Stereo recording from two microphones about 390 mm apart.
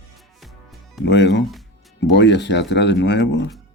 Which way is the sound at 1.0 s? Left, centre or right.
Left.